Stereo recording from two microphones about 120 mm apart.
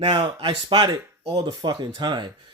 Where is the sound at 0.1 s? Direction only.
40° right (ahead or behind).